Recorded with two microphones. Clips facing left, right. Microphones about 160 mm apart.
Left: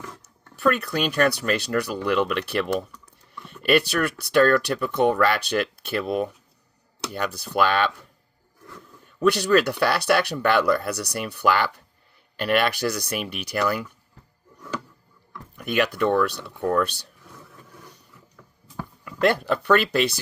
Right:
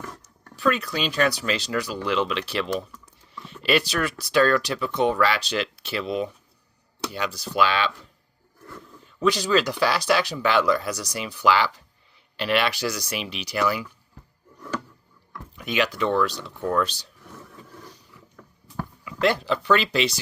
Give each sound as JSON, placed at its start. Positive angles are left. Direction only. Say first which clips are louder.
{"t": 0.5, "sound": "speech", "louder": "left 2 dB", "side_deg": 60}
{"t": 9.0, "sound": "speech", "louder": "left 3 dB", "side_deg": 60}
{"t": 15.5, "sound": "speech", "louder": "left 2 dB", "side_deg": 55}
{"t": 19.0, "sound": "speech", "louder": "left 2 dB", "side_deg": 55}